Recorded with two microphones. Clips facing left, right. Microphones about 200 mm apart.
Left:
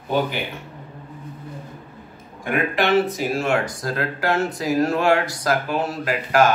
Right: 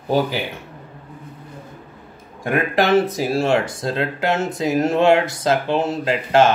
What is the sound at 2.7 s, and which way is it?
Speech, 40° right (ahead or behind).